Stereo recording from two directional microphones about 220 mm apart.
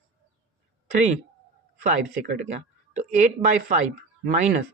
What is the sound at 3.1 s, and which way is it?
Speech, 35° right (ahead or behind).